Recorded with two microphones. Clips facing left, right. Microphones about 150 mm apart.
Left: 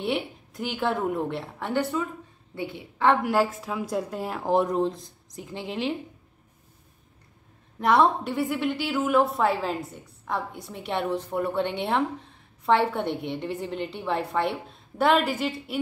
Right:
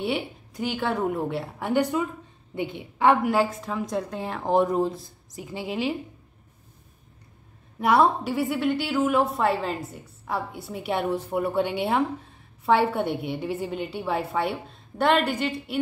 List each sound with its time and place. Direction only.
0.0 s a woman's voice: centre (ahead or behind); by 3.2 s 15° right (ahead or behind)
3.2 s a woman's voice: centre (ahead or behind)
7.8 s a woman's voice: 5° right (ahead or behind)